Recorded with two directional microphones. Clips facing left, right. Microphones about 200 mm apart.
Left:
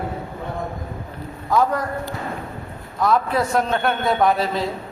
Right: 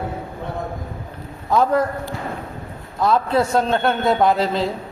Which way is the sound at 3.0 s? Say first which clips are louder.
Right 2 dB; 25° right (ahead or behind).